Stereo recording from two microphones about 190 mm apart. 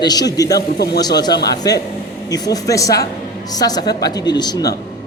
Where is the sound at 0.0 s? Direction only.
20° left (ahead or behind).